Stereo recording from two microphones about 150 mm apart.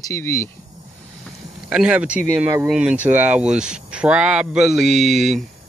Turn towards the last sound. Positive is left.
turn(degrees=0)  # may be behind; listen again after turning